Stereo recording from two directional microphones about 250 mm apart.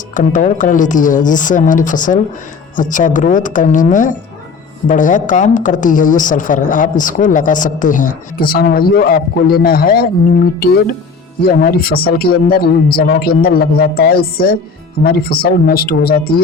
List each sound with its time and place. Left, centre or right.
0.1 s a woman's voice: left
11.4 s a woman's voice: left